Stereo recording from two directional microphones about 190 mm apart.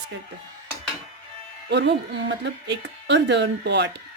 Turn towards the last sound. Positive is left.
turn(degrees=-65)  # may be behind; listen again after turning